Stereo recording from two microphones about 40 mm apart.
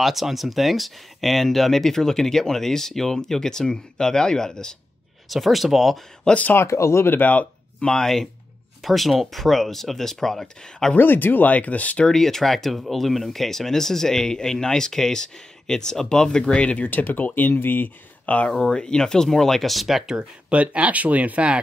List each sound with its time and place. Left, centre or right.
0.0 s speech: centre
5.3 s speech: centre
6.5 s speech: left
7.2 s speech: left
7.8 s speech: centre
11.0 s speech: left
11.4 s speech: left
12.1 s speech: centre
16.6 s speech: left
17.0 s speech: left
18.2 s speech: left
18.5 s speech: centre
20.2 s speech: right